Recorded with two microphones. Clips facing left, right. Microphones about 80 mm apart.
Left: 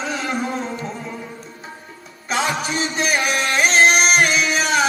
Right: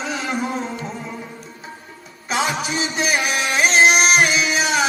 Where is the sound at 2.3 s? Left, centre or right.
Centre.